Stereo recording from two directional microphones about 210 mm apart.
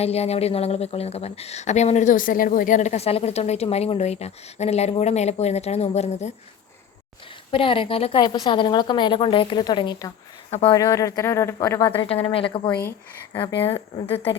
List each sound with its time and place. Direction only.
0.0 s speech: 30° left (ahead or behind)
7.5 s a woman's voice: 25° left (ahead or behind)
11.9 s a woman's voice: 25° left (ahead or behind)
13.6 s a woman's voice: 25° left (ahead or behind)